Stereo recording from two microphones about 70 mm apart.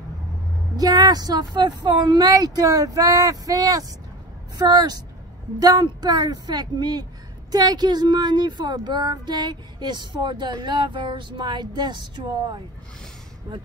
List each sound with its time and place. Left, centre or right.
0.7 s speech: right
4.6 s speech: right